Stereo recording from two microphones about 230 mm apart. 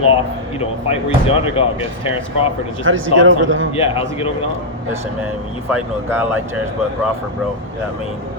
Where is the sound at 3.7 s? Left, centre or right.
Left.